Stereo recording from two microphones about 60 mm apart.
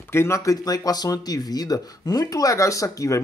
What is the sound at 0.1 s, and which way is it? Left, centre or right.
Speech, left.